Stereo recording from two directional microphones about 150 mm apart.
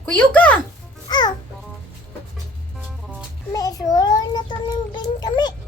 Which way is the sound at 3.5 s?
25° left (ahead or behind).